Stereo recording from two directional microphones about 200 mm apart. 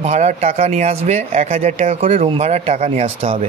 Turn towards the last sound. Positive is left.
turn(degrees=-30)  # may be behind; listen again after turning